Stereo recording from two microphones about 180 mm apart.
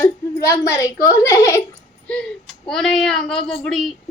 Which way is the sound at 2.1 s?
5° left (ahead or behind).